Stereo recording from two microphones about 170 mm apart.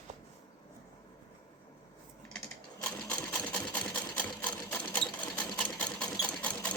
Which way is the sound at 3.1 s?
5° left (ahead or behind).